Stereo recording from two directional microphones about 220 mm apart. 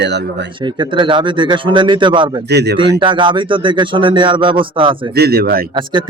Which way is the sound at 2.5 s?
50° right (ahead or behind).